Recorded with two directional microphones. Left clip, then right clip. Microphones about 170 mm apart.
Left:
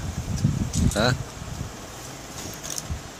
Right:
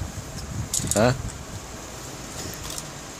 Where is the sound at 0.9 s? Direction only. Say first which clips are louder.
Right 3 dB; 25° right (ahead or behind).